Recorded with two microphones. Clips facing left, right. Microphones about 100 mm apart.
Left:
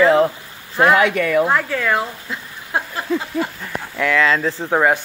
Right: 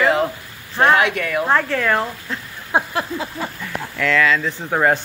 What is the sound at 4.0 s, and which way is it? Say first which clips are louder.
Speech: left 1 dB; 20° left (ahead or behind).